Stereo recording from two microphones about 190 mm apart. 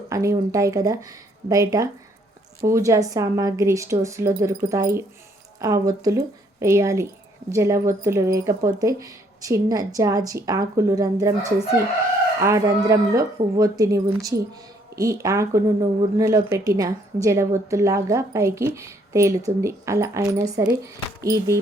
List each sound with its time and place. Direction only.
0.1 s speech: 15° right (ahead or behind)